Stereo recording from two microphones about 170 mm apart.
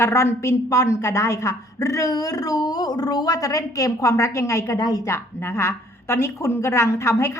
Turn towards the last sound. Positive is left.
turn(degrees=15)  # may be behind; listen again after turning